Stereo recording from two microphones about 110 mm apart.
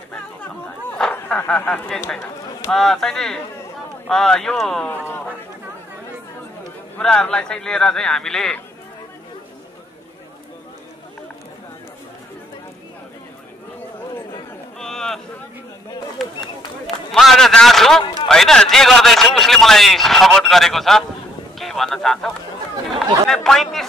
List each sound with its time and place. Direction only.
1.1 s a sound: 20° left (ahead or behind)
1.6 s a man's voice: 10° left (ahead or behind)
4.8 s speech: 20° left (ahead or behind)
7.0 s speech: 10° left (ahead or behind)
14.8 s a sound: 5° left (ahead or behind)
16.2 s a man's voice: centre (ahead or behind)